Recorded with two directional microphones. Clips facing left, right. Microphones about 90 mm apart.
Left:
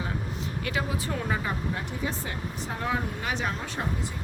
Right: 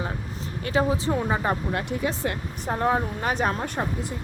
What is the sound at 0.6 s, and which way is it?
Speech, 35° right (ahead or behind).